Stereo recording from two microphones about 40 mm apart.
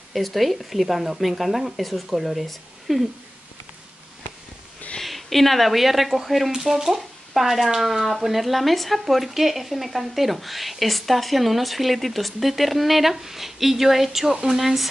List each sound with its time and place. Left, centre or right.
0.1 s speech: centre
5.0 s speech: centre